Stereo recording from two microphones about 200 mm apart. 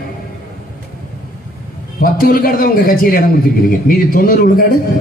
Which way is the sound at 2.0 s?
45° left (ahead or behind).